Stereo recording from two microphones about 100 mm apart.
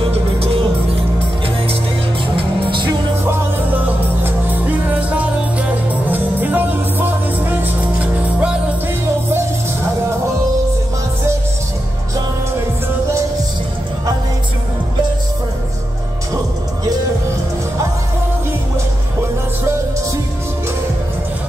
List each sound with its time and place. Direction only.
2.6 s music: 55° right (ahead or behind)
3.8 s music: 15° right (ahead or behind)